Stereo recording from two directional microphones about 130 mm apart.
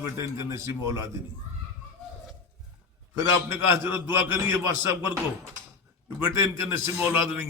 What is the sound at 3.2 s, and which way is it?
A man's voice, 20° right (ahead or behind).